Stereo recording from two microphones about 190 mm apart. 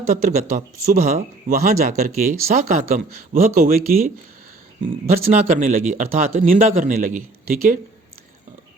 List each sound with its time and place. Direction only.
0.1 s speech: 40° right (ahead or behind)
5.3 s speech: 40° right (ahead or behind)